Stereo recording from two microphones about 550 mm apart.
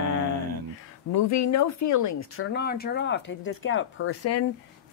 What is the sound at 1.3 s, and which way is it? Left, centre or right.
Speech, left.